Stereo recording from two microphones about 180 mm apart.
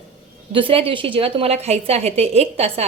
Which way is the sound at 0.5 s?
30° right (ahead or behind).